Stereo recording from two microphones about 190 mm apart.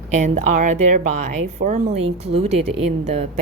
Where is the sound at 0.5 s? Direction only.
40° right (ahead or behind).